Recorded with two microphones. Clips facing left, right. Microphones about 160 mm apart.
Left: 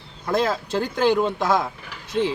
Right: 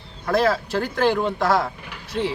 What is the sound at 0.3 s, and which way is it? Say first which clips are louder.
Speech: right 2 dB; 20° left (ahead or behind).